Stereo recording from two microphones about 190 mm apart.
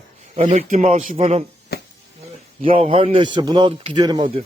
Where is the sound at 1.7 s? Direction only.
60° left (ahead or behind).